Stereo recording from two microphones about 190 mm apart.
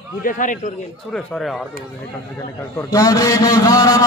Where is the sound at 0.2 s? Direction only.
45° left (ahead or behind).